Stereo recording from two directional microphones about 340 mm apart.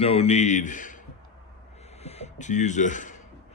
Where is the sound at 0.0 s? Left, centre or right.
Centre.